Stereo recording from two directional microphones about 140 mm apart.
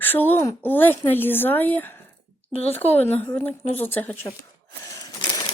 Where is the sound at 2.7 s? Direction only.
10° left (ahead or behind).